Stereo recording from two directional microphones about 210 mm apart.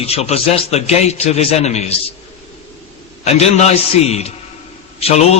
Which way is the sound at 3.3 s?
30° left (ahead or behind).